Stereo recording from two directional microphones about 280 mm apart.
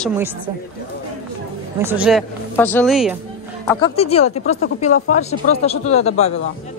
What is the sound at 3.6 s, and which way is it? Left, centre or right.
Speech, centre.